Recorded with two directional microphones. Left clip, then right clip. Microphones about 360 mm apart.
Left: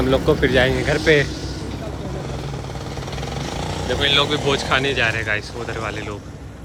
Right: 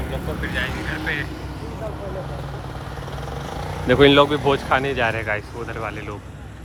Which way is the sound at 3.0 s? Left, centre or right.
Left.